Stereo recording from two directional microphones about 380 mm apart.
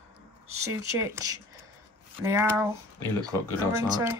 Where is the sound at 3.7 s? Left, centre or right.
Centre.